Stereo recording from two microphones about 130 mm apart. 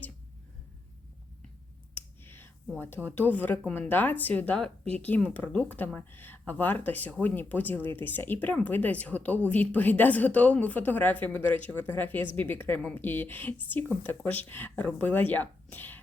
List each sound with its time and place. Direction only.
2.0 s whispering: 15° left (ahead or behind)
2.7 s speech: 15° left (ahead or behind)